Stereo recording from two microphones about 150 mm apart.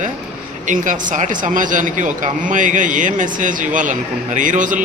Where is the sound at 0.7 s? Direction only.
55° right (ahead or behind).